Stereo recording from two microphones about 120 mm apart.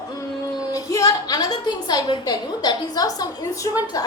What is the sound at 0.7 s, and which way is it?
A woman's voice, 30° left (ahead or behind).